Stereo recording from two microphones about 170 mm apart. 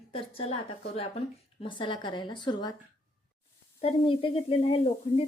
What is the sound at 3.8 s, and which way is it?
Speech, 30° left (ahead or behind).